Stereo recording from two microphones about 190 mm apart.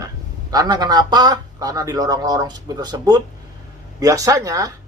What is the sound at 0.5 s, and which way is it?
Speech, 20° right (ahead or behind).